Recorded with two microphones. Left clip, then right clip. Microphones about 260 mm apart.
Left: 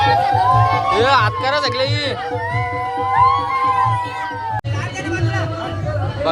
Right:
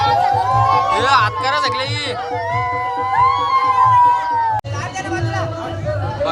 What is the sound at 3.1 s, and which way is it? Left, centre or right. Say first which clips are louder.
Music: left 1 dB; right.